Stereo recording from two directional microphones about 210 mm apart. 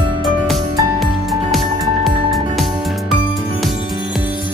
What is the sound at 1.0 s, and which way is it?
Music, centre (ahead or behind).